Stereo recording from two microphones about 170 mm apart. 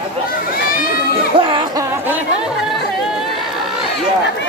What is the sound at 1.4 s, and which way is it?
Music, 30° right (ahead or behind).